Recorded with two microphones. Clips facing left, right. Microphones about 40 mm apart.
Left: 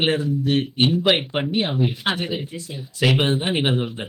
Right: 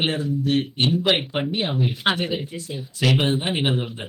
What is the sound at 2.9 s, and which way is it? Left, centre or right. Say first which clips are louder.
Speech: left 1 dB; centre.